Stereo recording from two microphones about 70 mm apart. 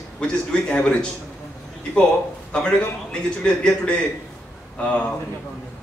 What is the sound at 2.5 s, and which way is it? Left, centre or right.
Speech, centre.